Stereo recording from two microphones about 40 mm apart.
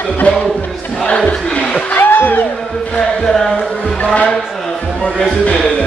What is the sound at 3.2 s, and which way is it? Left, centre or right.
Chant, centre.